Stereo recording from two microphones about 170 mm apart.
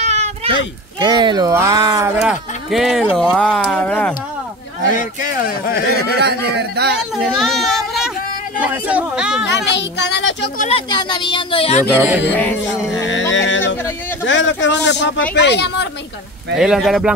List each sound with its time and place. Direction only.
0.0 s a sound: 40° right (ahead or behind)
0.9 s speech: 25° right (ahead or behind)
2.2 s speech: 5° right (ahead or behind)
4.9 s speech: 55° left (ahead or behind)
6.2 s a man's voice: 80° right
7.3 s child singing: centre (ahead or behind)
8.5 s a man's voice: 10° right (ahead or behind)
9.7 s speech: 90° left
10.9 s speech: 25° left (ahead or behind)
11.9 s a man's voice: 10° right (ahead or behind)
12.4 s music: 10° left (ahead or behind)
14.2 s speech: 90° left
16.5 s speech: centre (ahead or behind)